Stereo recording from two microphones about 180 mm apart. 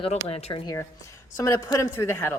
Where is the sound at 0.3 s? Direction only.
35° left (ahead or behind).